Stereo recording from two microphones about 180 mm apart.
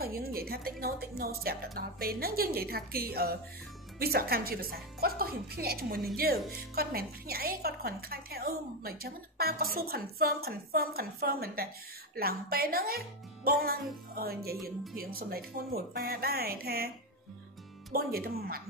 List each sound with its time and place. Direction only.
0.0 s a woman's voice: 55° right (ahead or behind)
17.9 s a woman's voice: 55° right (ahead or behind)